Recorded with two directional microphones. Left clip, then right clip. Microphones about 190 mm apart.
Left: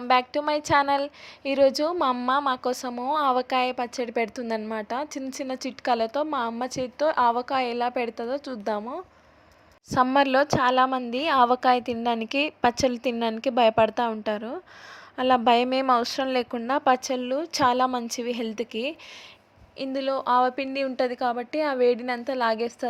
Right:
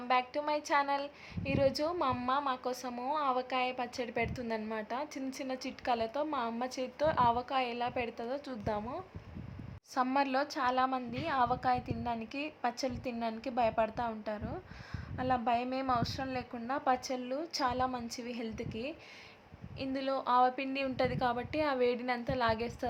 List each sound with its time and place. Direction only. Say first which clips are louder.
0.1 s a woman's voice: left 9 dB; 40° left (ahead or behind)
19.8 s a woman's voice: left 8 dB; 35° left (ahead or behind)